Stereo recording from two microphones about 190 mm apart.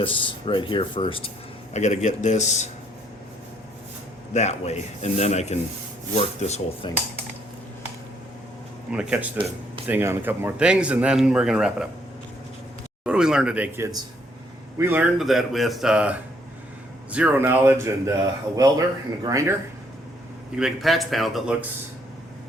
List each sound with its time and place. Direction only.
0.0 s speech: 25° left (ahead or behind)
1.7 s speech: 40° left (ahead or behind)
4.4 s speech: 35° left (ahead or behind)
6.8 s speech: 25° left (ahead or behind)
8.9 s speech: 5° right (ahead or behind)
13.1 s speech: 5° right (ahead or behind)
20.6 s speech: centre (ahead or behind)